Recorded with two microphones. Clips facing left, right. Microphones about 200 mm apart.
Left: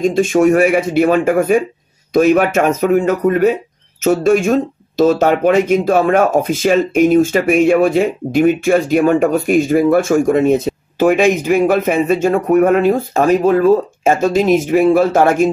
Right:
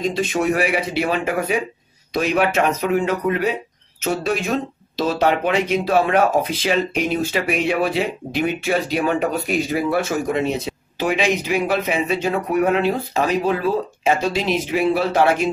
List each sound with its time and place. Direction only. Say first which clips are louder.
0.0 s speech: left 9 dB; 50° left (ahead or behind)